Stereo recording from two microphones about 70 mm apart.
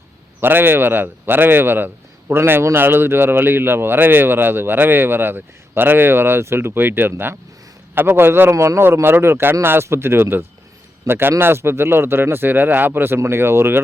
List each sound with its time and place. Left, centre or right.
0.3 s speech: right
8.4 s speech: right